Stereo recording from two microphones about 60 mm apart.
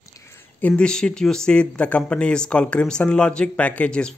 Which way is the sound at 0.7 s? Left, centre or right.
Centre.